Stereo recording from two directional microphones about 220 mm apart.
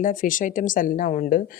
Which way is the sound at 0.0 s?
35° left (ahead or behind).